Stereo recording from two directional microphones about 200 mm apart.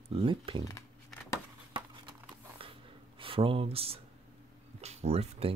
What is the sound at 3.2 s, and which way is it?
Speech, 25° right (ahead or behind).